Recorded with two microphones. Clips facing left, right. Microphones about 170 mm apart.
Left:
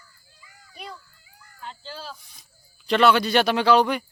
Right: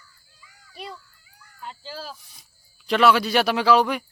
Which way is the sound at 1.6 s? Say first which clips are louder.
Right 1 dB; 10° right (ahead or behind).